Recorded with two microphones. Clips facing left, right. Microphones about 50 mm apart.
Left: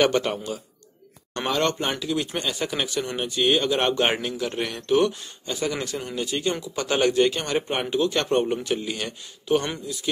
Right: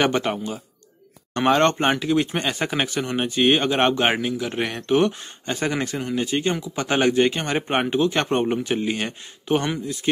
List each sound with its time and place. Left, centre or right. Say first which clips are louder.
0.0 s speech: even; centre
1.3 s speech: right 6 dB; right
4.0 s speech: right 2 dB; centre
4.6 s speech: right 1 dB; right
5.4 s speech: right 3 dB; right
6.5 s speech: right 2 dB; centre